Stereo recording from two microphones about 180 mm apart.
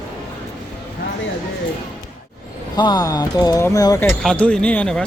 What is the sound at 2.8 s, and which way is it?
Speech, 25° left (ahead or behind).